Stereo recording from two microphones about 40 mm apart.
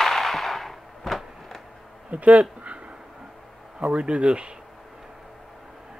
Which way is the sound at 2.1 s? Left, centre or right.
Right.